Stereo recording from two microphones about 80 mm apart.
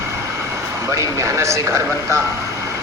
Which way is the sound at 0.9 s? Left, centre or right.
Right.